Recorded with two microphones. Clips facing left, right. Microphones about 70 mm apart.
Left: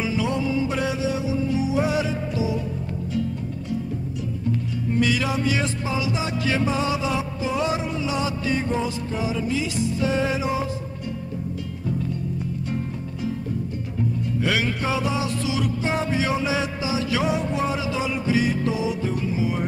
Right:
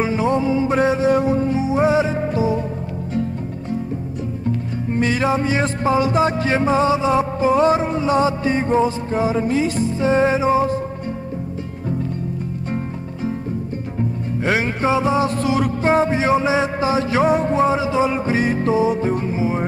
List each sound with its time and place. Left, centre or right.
0.0 s music: right
1.5 s music: right
4.9 s music: right
14.4 s music: right